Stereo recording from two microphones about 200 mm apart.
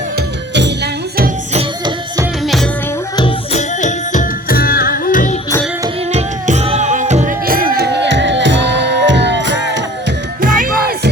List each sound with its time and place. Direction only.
1.5 s music: 20° right (ahead or behind)
3.2 s music: 30° left (ahead or behind)
6.1 s music: 35° right (ahead or behind); by 9.8 s 65° right (ahead or behind)
10.4 s music: 45° right (ahead or behind)